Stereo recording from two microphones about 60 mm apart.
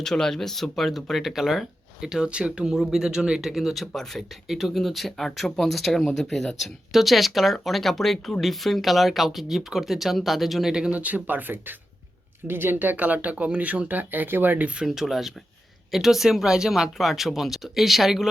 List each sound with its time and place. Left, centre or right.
0.0 s speech: centre; by 14.7 s right
14.8 s speech: centre